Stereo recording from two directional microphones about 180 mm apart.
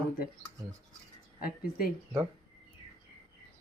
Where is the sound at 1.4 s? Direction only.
55° left (ahead or behind).